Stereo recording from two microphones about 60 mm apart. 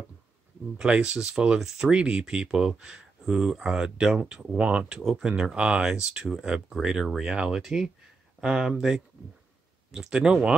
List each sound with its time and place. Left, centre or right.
0.7 s speech: centre
4.6 s speech: right
4.8 s speech: centre